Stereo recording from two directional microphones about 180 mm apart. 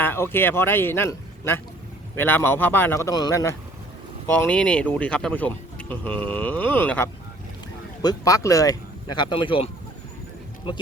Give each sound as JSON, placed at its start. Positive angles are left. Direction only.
{"t": 0.0, "sound": "a man's voice", "side_deg": 10}
{"t": 4.3, "sound": "speech", "side_deg": 5}